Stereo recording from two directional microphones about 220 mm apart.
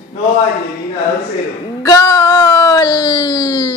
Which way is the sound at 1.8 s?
15° left (ahead or behind).